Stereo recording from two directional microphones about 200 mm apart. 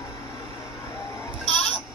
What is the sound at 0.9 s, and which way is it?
Music, 15° left (ahead or behind).